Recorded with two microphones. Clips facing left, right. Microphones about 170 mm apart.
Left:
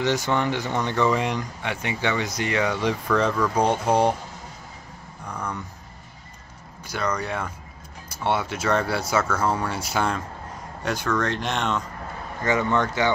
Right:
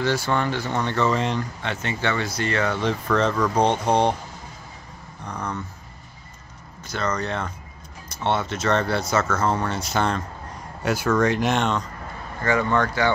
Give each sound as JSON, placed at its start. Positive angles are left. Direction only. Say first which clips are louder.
{"t": 0.0, "sound": "speech", "louder": "even", "side_deg": 20}
{"t": 5.2, "sound": "a sound", "louder": "right 1 dB", "side_deg": 10}
{"t": 6.9, "sound": "speech", "louder": "right 1 dB", "side_deg": 10}
{"t": 10.8, "sound": "speech", "louder": "right 4 dB", "side_deg": -5}
{"t": 12.4, "sound": "speech", "louder": "right 1 dB", "side_deg": 20}